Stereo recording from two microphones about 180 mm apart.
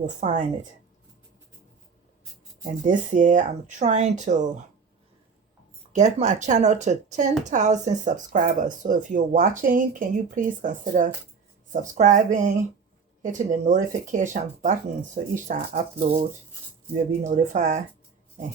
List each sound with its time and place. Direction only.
0.0 s speech: 40° right (ahead or behind)
2.8 s speech: 45° right (ahead or behind)
5.9 s speech: 40° right (ahead or behind)
17.2 s speech: 45° right (ahead or behind)